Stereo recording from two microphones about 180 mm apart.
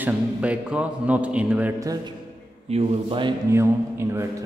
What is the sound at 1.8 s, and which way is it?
A man's voice, 20° right (ahead or behind).